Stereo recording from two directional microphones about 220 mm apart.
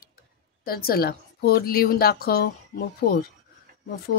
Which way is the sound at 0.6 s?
45° left (ahead or behind).